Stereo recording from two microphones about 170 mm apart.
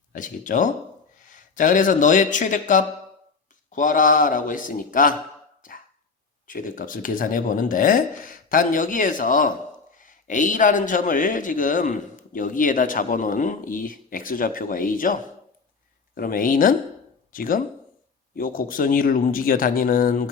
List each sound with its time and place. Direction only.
0.1 s a man's voice: 50° left (ahead or behind)
6.5 s a man's voice: 55° left (ahead or behind)